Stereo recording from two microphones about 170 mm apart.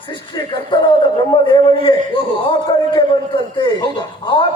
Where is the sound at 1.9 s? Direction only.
30° left (ahead or behind).